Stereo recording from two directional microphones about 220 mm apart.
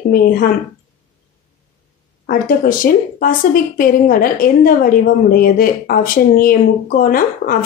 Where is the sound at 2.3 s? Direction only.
40° left (ahead or behind).